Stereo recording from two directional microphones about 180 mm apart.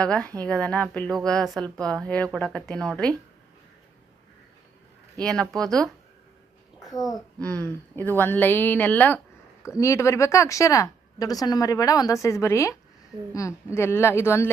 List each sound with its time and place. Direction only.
0.0 s a woman's voice: 5° left (ahead or behind)
5.2 s a woman's voice: 5° left (ahead or behind)
7.3 s speech: 5° left (ahead or behind)